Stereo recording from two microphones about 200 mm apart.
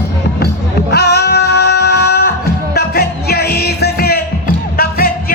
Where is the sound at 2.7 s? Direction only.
50° left (ahead or behind).